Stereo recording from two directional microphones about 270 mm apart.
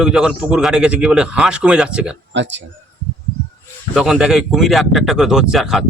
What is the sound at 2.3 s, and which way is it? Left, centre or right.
Speech, right.